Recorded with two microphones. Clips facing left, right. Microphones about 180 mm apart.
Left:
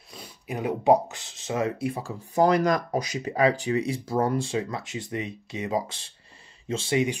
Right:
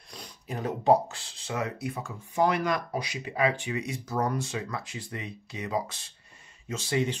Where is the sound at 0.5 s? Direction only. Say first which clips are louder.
Left 2 dB; 15° left (ahead or behind).